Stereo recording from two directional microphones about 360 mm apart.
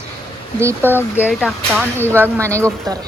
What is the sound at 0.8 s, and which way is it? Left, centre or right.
Speech, centre.